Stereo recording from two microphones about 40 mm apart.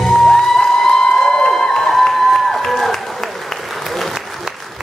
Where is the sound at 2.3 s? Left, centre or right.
Centre.